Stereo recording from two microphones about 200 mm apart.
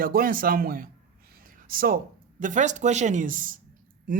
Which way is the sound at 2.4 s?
40° right (ahead or behind).